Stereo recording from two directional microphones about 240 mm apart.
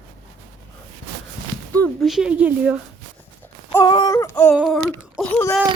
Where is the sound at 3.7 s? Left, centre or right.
Centre.